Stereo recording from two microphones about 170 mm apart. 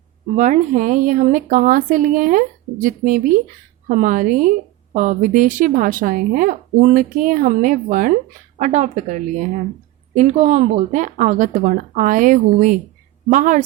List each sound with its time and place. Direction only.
0.3 s a woman's voice: 45° right (ahead or behind)